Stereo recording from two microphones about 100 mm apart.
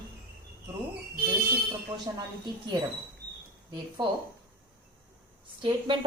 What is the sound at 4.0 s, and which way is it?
Speech, 45° right (ahead or behind).